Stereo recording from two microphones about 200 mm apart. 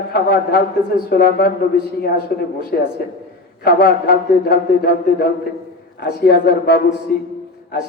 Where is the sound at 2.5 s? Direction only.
50° left (ahead or behind).